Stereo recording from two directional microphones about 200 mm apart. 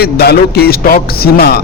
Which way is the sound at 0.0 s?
50° left (ahead or behind).